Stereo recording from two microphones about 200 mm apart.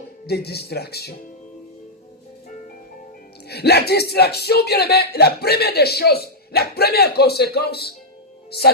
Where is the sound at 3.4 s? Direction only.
55° left (ahead or behind).